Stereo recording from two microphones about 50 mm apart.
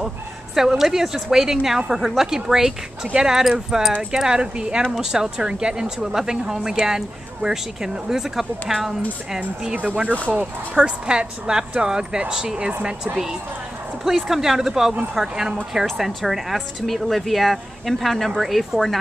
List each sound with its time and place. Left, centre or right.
0.6 s speech: centre
10.3 s a woman's voice: right; by 18.9 s centre